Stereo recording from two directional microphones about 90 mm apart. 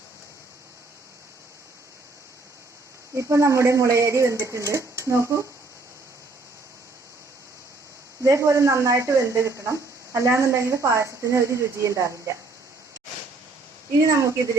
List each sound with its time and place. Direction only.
3.2 s speech: 35° right (ahead or behind)
8.2 s speech: 35° right (ahead or behind)
14.1 s speech: 35° right (ahead or behind)